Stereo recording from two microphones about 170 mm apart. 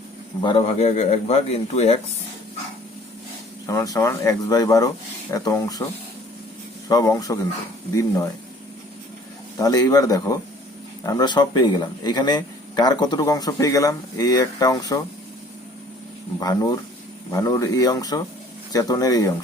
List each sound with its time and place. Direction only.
0.4 s a man's voice: 35° left (ahead or behind)
3.7 s a man's voice: 20° left (ahead or behind)
9.6 s a man's voice: 20° left (ahead or behind)
16.4 s a man's voice: 20° left (ahead or behind)